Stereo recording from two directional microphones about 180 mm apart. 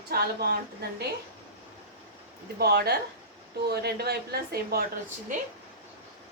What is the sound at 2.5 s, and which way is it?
Speech, 60° right (ahead or behind).